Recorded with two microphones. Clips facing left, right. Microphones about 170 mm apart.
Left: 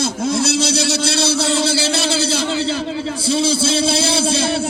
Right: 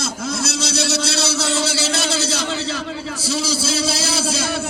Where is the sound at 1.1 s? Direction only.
60° left (ahead or behind).